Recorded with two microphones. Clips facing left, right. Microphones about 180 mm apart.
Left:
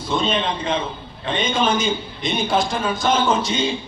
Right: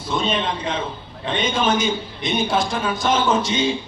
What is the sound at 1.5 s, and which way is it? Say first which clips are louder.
A man's voice: even; centre (ahead or behind).